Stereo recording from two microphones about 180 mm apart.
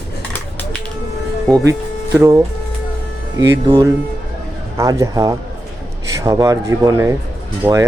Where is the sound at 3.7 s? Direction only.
20° right (ahead or behind).